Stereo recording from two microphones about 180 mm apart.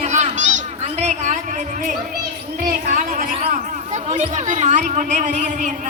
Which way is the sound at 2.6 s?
50° right (ahead or behind).